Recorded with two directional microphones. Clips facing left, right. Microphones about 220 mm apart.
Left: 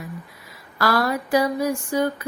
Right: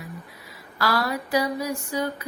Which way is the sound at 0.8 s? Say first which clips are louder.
Left 4 dB; 50° left (ahead or behind).